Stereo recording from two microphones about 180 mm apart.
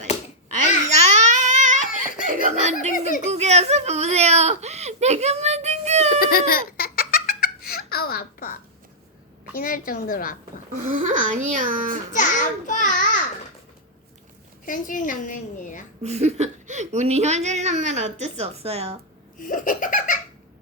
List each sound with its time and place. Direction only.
0.5 s babbling: 40° right (ahead or behind)
2.2 s a sound: 45° right (ahead or behind)
3.2 s whimper: 40° right (ahead or behind)
6.1 s laughter: 55° left (ahead or behind)
9.6 s a woman's voice: 50° left (ahead or behind)
10.8 s a child's voice: 45° right (ahead or behind)
12.1 s a child's voice: 45° left (ahead or behind)
14.6 s a woman's voice: 50° left (ahead or behind)
16.0 s a woman's voice: 35° right (ahead or behind)
19.4 s a woman's voice: 50° left (ahead or behind)